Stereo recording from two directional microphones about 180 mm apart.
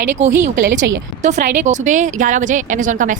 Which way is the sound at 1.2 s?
40° right (ahead or behind).